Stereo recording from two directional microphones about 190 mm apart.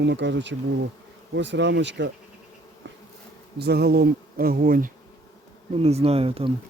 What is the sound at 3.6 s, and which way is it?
Bee, 60° right (ahead or behind).